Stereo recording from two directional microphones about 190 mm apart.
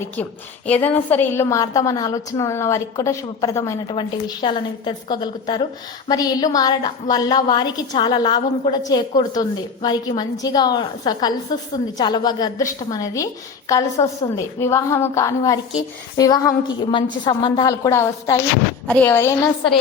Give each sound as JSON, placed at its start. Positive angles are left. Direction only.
{"t": 0.7, "sound": "a woman's voice", "side_deg": 10}